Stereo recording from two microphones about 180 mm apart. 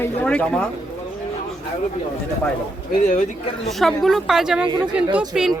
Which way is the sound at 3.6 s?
Centre (ahead or behind).